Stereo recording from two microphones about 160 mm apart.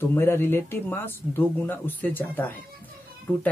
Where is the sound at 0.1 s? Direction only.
15° left (ahead or behind).